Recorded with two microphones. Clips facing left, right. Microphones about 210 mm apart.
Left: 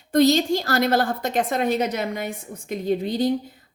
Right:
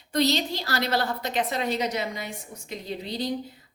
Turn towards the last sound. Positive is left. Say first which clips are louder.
# left 9 dB
turn(degrees=50)  # may be behind; listen again after turning